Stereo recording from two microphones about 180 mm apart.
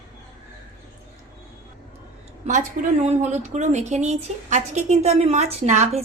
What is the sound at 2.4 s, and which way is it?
A woman's voice, 40° right (ahead or behind).